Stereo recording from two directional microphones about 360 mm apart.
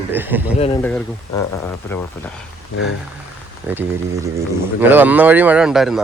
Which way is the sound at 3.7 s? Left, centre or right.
Centre.